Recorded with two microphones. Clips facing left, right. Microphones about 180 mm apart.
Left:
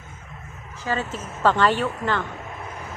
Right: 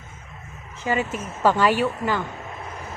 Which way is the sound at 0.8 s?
15° right (ahead or behind).